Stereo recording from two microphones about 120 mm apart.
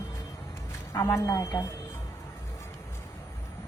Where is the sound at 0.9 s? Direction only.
25° left (ahead or behind).